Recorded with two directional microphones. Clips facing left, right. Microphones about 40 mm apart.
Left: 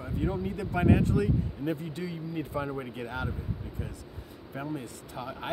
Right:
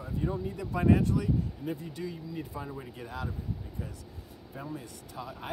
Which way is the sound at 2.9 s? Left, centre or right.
Left.